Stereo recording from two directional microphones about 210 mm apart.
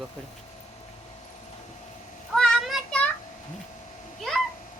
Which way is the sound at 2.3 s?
Centre (ahead or behind).